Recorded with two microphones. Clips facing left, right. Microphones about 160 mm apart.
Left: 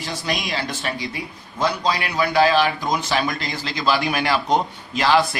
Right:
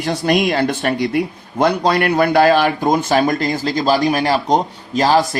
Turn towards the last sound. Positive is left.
turn(degrees=-40)  # may be behind; listen again after turning